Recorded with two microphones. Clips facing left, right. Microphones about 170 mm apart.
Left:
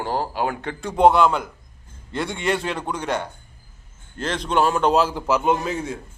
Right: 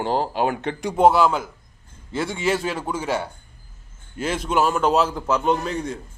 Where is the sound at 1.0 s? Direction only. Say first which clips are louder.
Left 1 dB; centre (ahead or behind).